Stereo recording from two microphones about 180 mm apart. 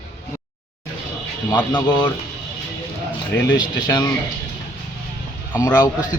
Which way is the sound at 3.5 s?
25° left (ahead or behind).